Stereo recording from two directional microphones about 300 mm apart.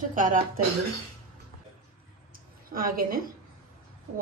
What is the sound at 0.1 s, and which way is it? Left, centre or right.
Speech, right.